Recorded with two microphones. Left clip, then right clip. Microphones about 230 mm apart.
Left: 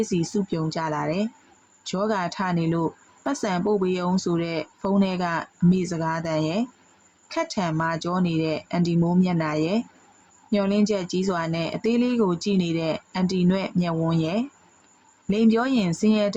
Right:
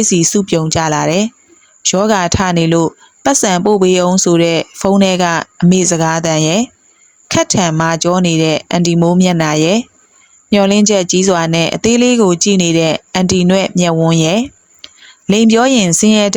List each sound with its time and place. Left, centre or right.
0.0 s a woman's voice: right